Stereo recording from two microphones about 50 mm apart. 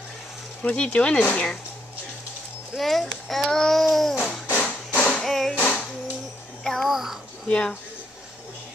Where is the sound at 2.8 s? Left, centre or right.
Centre.